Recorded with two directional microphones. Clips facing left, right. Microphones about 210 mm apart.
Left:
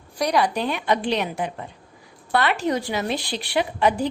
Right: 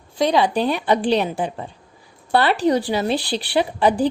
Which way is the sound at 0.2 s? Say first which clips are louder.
Right 4 dB; 25° right (ahead or behind).